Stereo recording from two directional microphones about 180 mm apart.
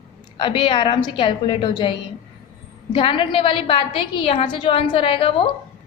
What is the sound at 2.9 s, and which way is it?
A woman's voice, 30° left (ahead or behind).